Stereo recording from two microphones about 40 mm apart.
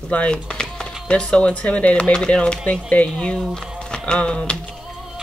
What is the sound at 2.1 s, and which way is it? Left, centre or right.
Speech, left.